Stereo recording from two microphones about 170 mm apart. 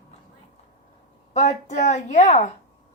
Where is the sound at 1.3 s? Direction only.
40° left (ahead or behind).